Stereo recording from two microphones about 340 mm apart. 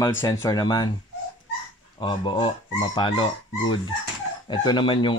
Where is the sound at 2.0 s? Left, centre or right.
Centre.